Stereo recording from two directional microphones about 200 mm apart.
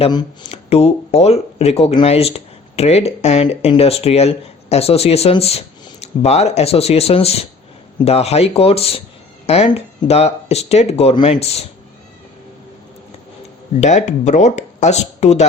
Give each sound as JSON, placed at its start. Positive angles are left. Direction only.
{"t": 0.0, "sound": "speech", "side_deg": 20}
{"t": 0.4, "sound": "speech", "side_deg": 30}
{"t": 13.8, "sound": "speech", "side_deg": 35}